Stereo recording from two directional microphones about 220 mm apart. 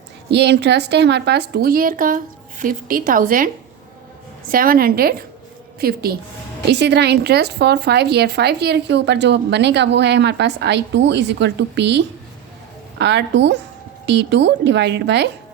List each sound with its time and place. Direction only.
0.3 s a woman's voice: 50° right (ahead or behind)